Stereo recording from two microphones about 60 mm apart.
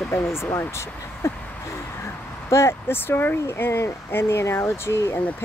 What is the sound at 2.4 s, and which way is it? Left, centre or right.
Speech, left.